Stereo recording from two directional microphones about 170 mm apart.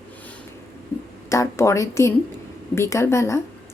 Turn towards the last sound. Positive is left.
turn(degrees=15)  # may be behind; listen again after turning